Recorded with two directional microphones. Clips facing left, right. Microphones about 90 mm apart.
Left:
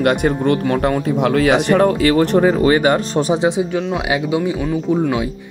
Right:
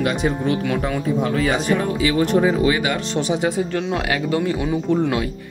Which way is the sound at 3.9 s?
15° left (ahead or behind).